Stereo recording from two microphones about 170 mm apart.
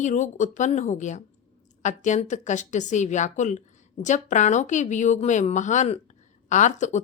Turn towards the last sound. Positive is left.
turn(degrees=45)  # may be behind; listen again after turning